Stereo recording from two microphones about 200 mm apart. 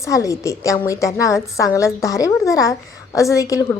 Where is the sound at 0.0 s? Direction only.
15° left (ahead or behind).